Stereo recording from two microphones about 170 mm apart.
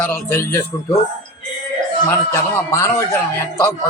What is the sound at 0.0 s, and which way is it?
Speech, 15° left (ahead or behind).